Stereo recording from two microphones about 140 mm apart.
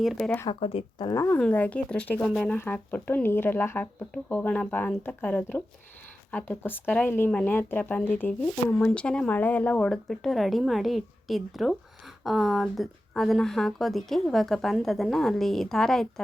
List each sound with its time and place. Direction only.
0.0 s speech: centre (ahead or behind)
0.6 s speech: 45° left (ahead or behind)
1.1 s speech: 20° left (ahead or behind); by 16.2 s 5° left (ahead or behind)